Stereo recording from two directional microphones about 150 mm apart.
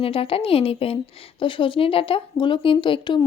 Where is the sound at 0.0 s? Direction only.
40° left (ahead or behind).